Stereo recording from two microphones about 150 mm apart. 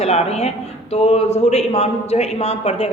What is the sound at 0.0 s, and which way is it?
A woman's voice, 45° left (ahead or behind).